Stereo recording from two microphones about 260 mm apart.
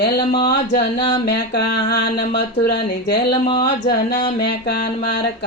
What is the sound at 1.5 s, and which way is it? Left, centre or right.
Speech, left.